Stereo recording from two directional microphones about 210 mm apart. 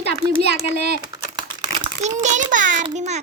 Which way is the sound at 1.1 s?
20° right (ahead or behind).